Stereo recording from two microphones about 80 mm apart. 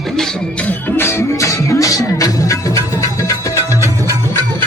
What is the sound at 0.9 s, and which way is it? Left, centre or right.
Music, left.